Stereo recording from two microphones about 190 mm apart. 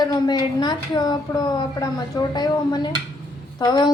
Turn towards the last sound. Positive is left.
turn(degrees=20)  # may be behind; listen again after turning